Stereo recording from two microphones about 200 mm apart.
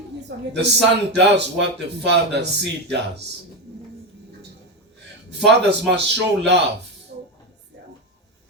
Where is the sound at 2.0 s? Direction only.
60° right (ahead or behind).